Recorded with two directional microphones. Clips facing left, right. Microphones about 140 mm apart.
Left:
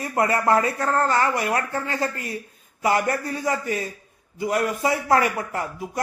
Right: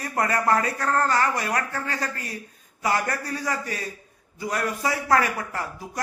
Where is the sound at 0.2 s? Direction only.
25° left (ahead or behind).